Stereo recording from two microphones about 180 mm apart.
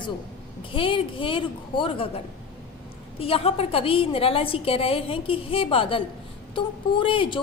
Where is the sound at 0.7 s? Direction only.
30° left (ahead or behind).